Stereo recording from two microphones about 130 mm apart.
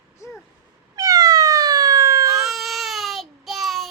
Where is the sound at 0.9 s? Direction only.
30° right (ahead or behind).